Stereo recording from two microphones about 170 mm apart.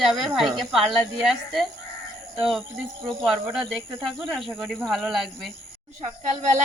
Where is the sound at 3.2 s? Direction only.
5° right (ahead or behind).